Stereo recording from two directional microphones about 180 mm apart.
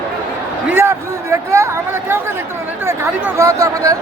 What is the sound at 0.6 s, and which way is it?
Speech, 10° right (ahead or behind).